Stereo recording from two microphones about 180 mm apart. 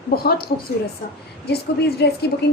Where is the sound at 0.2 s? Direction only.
60° left (ahead or behind).